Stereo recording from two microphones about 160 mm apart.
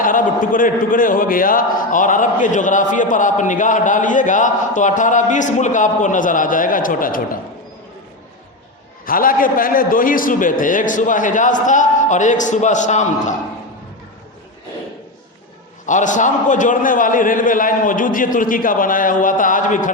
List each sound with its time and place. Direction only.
0.0 s a man's voice: 60° left (ahead or behind)
9.0 s a man's voice: 60° left (ahead or behind)
15.9 s a man's voice: 50° left (ahead or behind)